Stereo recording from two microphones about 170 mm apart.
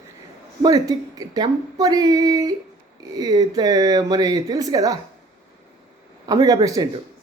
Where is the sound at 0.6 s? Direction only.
20° right (ahead or behind).